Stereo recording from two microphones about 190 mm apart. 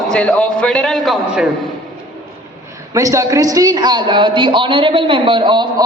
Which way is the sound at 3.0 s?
15° right (ahead or behind).